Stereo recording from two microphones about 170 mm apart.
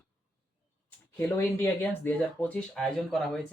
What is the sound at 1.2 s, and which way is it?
Speech, 10° left (ahead or behind).